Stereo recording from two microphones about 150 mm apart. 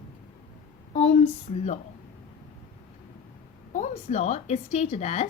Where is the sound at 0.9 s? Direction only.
45° left (ahead or behind).